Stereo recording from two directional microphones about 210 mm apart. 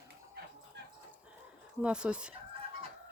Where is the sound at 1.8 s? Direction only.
5° right (ahead or behind).